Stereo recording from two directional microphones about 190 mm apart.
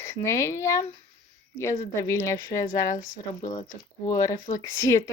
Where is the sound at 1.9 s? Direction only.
15° left (ahead or behind).